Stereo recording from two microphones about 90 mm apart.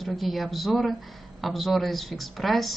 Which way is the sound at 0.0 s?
Centre (ahead or behind).